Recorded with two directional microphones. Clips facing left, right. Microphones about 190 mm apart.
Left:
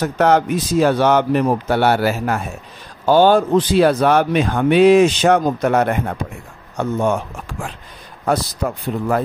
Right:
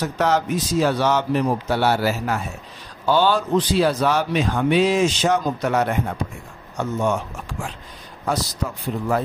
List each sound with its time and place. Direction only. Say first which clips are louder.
0.0 s speech: left 5 dB; 55° left (ahead or behind)
8.3 s speech: left 5 dB; 55° left (ahead or behind)